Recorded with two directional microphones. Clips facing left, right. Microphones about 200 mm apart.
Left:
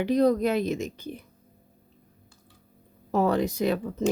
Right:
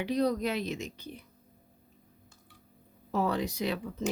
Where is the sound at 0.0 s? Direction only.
50° left (ahead or behind).